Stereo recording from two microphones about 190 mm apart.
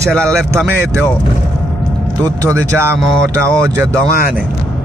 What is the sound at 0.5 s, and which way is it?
Speech, 15° right (ahead or behind).